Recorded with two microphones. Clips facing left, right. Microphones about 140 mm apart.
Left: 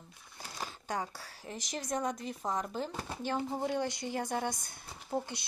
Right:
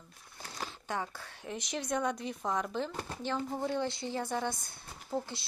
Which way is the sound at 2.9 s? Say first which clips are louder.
Even; 20° left (ahead or behind).